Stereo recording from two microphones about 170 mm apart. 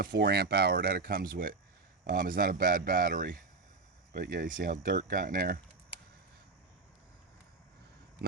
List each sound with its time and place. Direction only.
0.0 s speech: 70° right (ahead or behind)